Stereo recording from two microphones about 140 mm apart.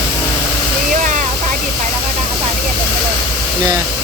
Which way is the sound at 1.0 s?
65° right (ahead or behind).